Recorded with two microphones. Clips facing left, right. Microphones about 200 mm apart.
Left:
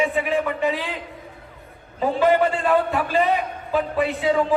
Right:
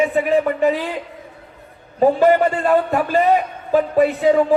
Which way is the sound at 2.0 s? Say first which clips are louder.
Right 6 dB; 45° right (ahead or behind).